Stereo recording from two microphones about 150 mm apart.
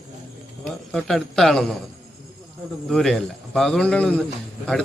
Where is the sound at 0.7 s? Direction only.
Centre (ahead or behind).